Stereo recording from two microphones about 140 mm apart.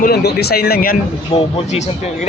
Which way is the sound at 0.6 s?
90° left.